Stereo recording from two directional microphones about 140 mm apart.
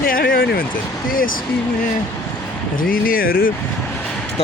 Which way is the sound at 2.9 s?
90° left.